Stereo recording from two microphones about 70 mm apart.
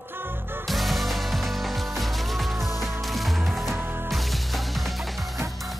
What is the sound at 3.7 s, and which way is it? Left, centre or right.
Music, right.